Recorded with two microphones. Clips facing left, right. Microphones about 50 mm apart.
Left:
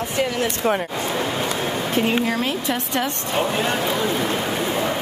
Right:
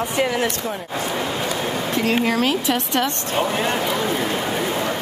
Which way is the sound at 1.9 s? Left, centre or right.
Right.